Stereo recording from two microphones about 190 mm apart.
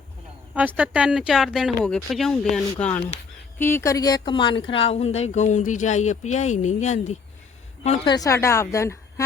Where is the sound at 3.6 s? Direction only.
10° left (ahead or behind); by 7.2 s 40° left (ahead or behind).